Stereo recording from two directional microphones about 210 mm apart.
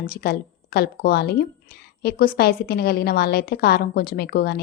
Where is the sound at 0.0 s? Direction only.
45° left (ahead or behind).